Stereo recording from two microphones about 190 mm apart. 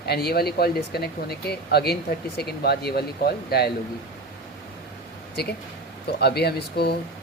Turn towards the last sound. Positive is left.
turn(degrees=60)  # may be behind; listen again after turning